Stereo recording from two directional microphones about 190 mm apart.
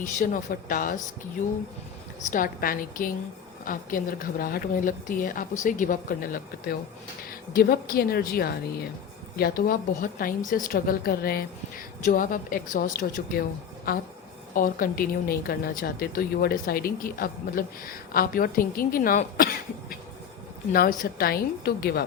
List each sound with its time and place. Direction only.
0.0 s speech: 40° left (ahead or behind)
2.3 s speech: 45° left (ahead or behind)
21.0 s speech: 50° left (ahead or behind)